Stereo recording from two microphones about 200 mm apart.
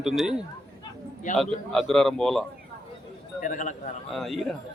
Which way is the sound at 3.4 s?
40° left (ahead or behind).